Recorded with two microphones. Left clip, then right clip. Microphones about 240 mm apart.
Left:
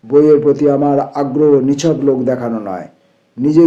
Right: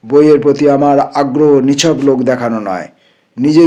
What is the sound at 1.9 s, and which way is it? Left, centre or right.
Speech, right.